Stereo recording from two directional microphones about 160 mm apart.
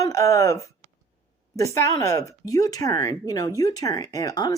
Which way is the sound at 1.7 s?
20° left (ahead or behind).